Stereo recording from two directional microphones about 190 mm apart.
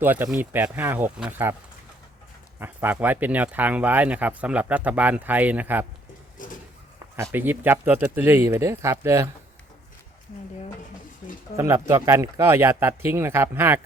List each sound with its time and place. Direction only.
0.0 s speech: 10° right (ahead or behind)
2.6 s speech: 10° right (ahead or behind)
6.4 s a sound: 45° left (ahead or behind)
7.2 s speech: 10° right (ahead or behind)
11.5 s speech: 15° right (ahead or behind)